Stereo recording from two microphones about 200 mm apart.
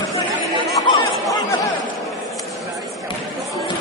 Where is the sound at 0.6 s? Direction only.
15° left (ahead or behind).